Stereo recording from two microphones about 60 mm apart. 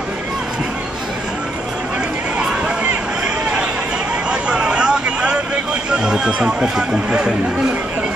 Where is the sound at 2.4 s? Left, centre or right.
Centre.